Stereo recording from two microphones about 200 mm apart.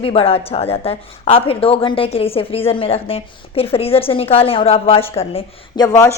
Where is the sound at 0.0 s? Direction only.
30° left (ahead or behind).